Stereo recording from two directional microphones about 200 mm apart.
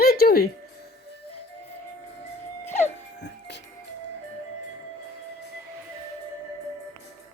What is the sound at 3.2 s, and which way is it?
Music, 60° left (ahead or behind).